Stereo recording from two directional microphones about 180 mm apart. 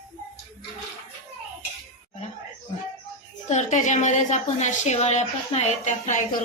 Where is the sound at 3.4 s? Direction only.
40° left (ahead or behind).